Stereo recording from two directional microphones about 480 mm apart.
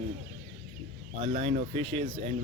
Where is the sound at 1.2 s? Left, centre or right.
Centre.